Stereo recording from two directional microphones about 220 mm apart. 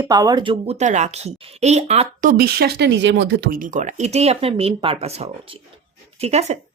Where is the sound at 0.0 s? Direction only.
15° right (ahead or behind).